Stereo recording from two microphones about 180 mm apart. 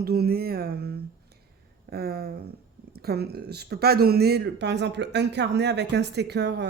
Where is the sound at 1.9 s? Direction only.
60° right (ahead or behind).